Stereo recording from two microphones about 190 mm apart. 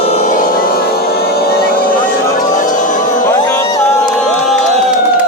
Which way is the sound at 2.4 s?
45° left (ahead or behind).